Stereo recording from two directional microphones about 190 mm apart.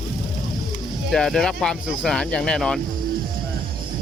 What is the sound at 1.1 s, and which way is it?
Speech, centre (ahead or behind).